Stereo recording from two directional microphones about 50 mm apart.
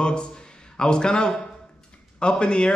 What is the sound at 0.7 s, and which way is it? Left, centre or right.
A man's voice, centre.